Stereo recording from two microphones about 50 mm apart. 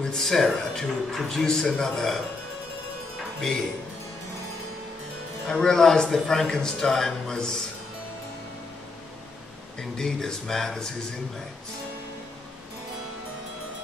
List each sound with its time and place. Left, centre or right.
0.0 s a man's voice: centre
5.5 s a man's voice: centre
9.8 s a man's voice: centre